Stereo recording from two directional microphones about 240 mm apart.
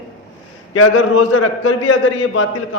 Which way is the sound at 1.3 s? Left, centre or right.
Left.